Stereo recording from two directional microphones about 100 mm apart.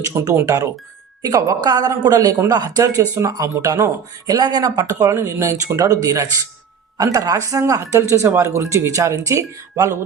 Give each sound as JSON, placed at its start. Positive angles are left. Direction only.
{"t": 0.1, "sound": "speech", "side_deg": -25}
{"t": 4.8, "sound": "speech", "side_deg": -30}